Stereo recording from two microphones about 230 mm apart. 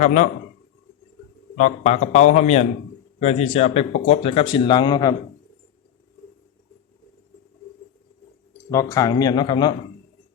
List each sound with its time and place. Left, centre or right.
0.0 s a man's voice: left
1.5 s a man's voice: left
8.7 s speech: centre